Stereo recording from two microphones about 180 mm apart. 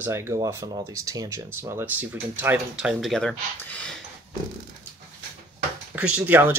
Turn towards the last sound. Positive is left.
turn(degrees=-10)  # may be behind; listen again after turning